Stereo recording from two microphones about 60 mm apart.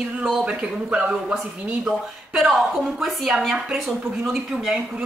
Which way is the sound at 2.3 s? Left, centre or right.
Centre.